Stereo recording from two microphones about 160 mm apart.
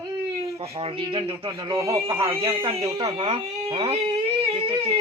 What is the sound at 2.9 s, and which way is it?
A man's voice, 30° right (ahead or behind).